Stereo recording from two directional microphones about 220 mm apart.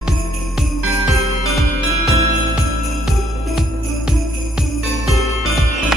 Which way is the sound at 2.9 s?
Centre (ahead or behind).